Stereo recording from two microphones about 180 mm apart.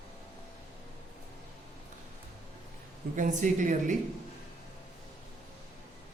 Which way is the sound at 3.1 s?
45° right (ahead or behind).